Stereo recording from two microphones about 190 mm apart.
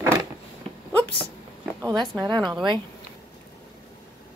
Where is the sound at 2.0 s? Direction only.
20° right (ahead or behind).